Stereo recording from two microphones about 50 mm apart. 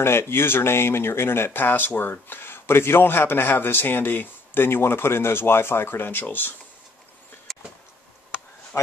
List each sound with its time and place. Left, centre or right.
0.0 s speech: left
7.5 s vehicle: centre
8.7 s a man's voice: left